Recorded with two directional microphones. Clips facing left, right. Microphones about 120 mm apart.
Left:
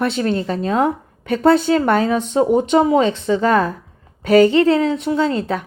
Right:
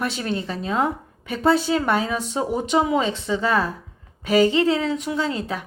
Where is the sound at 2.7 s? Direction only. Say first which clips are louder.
Left 4 dB; 35° left (ahead or behind).